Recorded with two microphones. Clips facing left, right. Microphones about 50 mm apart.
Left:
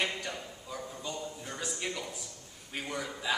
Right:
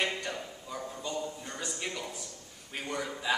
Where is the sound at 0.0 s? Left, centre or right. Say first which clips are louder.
Right 1 dB; centre.